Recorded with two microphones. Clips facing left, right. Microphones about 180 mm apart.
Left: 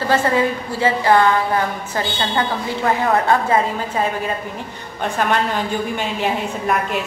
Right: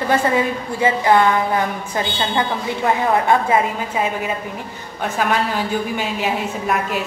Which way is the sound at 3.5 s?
10° right (ahead or behind).